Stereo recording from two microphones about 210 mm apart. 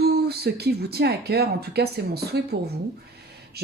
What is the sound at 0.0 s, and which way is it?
Speech, 50° right (ahead or behind).